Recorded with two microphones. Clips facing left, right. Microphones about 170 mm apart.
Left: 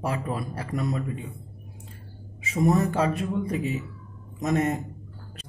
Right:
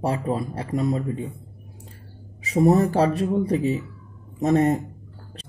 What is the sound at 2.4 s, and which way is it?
Speech, 35° right (ahead or behind).